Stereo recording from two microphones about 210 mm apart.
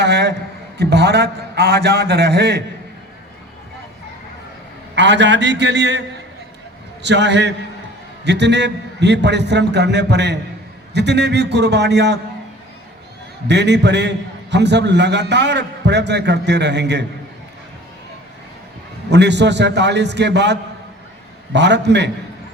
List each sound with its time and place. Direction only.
0.0 s a sound: 50° right (ahead or behind)
0.8 s a man's voice: 50° right (ahead or behind)
4.9 s a man's voice: 55° right (ahead or behind)
7.0 s a man's voice: 55° right (ahead or behind)
13.5 s a man's voice: 55° right (ahead or behind)
19.1 s a man's voice: 55° right (ahead or behind)